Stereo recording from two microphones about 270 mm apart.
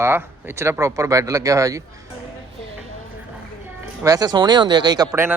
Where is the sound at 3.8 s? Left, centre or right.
Centre.